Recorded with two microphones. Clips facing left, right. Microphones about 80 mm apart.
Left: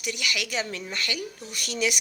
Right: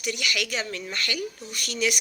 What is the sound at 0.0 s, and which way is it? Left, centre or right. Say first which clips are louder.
Speech: right 2 dB; centre.